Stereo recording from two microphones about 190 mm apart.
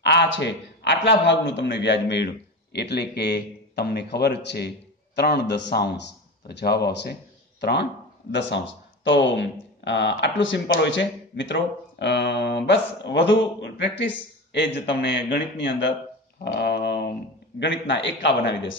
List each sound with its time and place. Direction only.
0.0 s a man's voice: 65° left (ahead or behind)
8.3 s speech: 70° left (ahead or behind)
16.5 s a sound: 65° left (ahead or behind)
17.6 s speech: 70° left (ahead or behind)